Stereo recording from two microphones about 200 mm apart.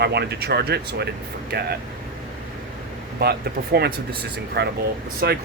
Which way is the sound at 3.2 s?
50° right (ahead or behind).